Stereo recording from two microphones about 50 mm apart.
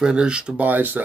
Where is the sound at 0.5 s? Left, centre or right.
Right.